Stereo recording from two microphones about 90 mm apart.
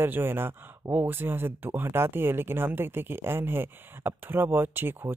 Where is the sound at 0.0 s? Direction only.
25° right (ahead or behind).